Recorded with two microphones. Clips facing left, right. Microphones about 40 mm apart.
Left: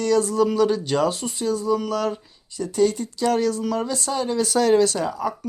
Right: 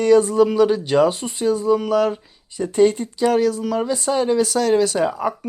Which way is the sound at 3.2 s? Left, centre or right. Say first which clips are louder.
Right 3 dB; centre.